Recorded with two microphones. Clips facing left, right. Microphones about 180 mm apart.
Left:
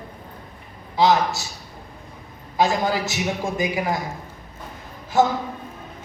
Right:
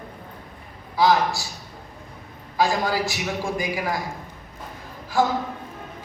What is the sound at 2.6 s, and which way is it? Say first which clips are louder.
Speech: left 1 dB; 20° left (ahead or behind).